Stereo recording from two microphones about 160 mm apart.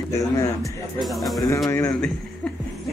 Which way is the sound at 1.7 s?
15° left (ahead or behind).